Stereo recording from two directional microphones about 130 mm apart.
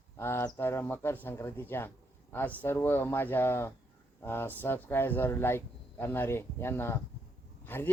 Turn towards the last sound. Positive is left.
turn(degrees=15)  # may be behind; listen again after turning